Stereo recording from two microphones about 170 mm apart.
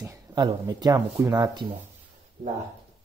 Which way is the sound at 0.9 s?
20° right (ahead or behind).